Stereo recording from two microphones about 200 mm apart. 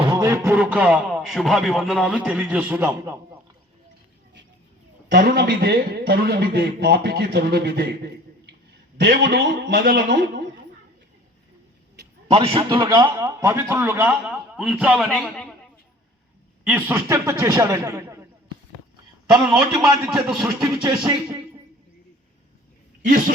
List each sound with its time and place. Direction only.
0.0 s a man's voice: 20° right (ahead or behind)
5.1 s a man's voice: 50° right (ahead or behind)
9.0 s a man's voice: 55° right (ahead or behind)
12.3 s a man's voice: 25° right (ahead or behind); by 15.5 s 5° left (ahead or behind)
16.6 s a man's voice: 10° right (ahead or behind)
19.8 s a man's voice: centre (ahead or behind)
21.0 s a man's voice: 25° right (ahead or behind)
23.0 s a man's voice: 45° right (ahead or behind)